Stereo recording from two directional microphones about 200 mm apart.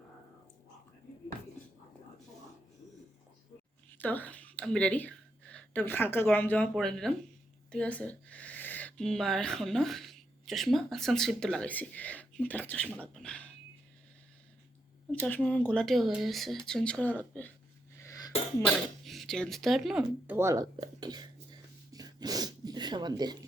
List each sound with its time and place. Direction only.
3.9 s speech: 10° left (ahead or behind)
15.4 s speech: 5° left (ahead or behind)
18.0 s sneeze: 15° left (ahead or behind)
18.6 s speech: centre (ahead or behind); by 23.5 s 20° right (ahead or behind)